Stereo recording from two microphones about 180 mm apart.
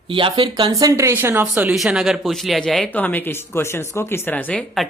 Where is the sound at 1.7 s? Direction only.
Centre (ahead or behind).